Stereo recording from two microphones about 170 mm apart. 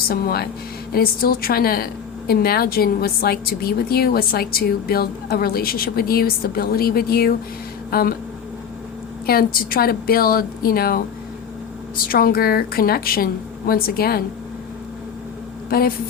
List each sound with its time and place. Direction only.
0.1 s a woman's voice: 60° left (ahead or behind)
9.2 s a woman's voice: 65° left (ahead or behind)
15.7 s a woman's voice: 60° left (ahead or behind)